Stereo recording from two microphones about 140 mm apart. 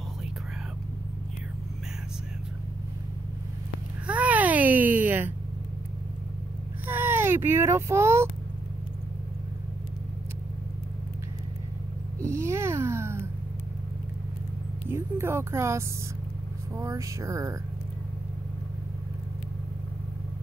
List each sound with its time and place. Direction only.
4.1 s baby cry: 10° right (ahead or behind)
6.9 s speech: 15° right (ahead or behind)
12.2 s a sound: 20° right (ahead or behind)
14.9 s speech: 15° right (ahead or behind)